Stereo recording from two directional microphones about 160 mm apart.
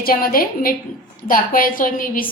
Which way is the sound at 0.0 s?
65° left (ahead or behind).